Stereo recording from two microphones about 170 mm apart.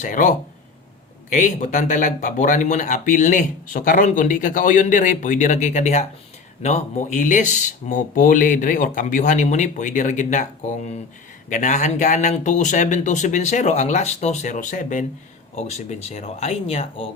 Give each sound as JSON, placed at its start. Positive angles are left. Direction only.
{"t": 0.0, "sound": "speech", "side_deg": 50}